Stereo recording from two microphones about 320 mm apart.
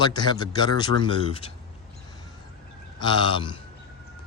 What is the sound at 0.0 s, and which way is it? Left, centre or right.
Speech, centre.